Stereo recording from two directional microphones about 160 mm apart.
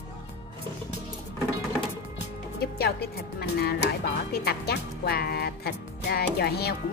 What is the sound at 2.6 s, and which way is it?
Speech, 85° left.